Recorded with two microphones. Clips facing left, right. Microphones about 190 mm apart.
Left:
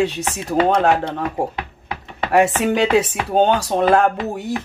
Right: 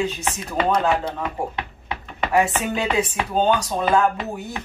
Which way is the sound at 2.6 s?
75° left (ahead or behind).